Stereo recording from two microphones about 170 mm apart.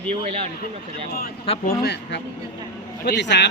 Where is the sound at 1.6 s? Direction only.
75° left (ahead or behind).